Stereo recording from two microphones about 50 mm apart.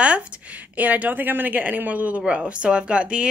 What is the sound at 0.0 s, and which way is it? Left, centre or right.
A woman's voice, right.